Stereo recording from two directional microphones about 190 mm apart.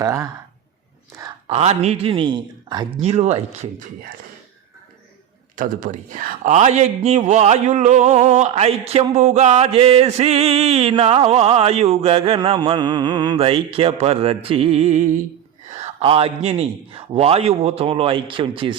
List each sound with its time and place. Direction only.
0.0 s speech: 15° right (ahead or behind)
1.5 s speech: 35° right (ahead or behind)
3.0 s a man's voice: 35° right (ahead or behind)
5.5 s a man's voice: 45° right (ahead or behind); by 18.8 s 25° right (ahead or behind)